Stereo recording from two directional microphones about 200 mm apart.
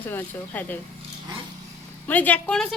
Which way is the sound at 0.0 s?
10° left (ahead or behind).